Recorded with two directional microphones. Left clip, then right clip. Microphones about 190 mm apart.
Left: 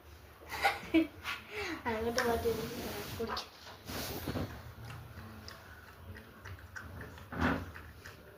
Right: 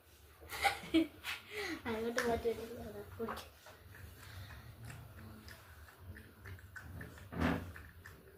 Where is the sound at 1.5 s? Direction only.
25° right (ahead or behind).